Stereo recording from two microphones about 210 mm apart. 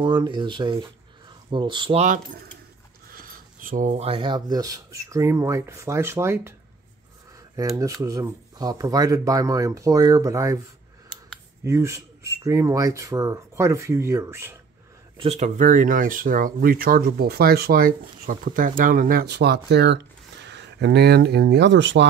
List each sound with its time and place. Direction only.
0.0 s speech: 20° right (ahead or behind)
7.5 s speech: 15° right (ahead or behind)
11.6 s speech: 15° right (ahead or behind)
15.1 s speech: 30° right (ahead or behind); by 22.0 s 60° right (ahead or behind)